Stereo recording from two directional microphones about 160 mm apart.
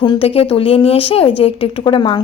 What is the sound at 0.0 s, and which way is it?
A woman's voice, 35° left (ahead or behind).